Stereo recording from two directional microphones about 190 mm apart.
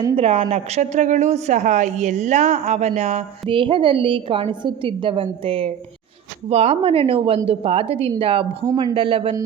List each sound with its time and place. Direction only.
0.2 s a woman's voice: 35° right (ahead or behind)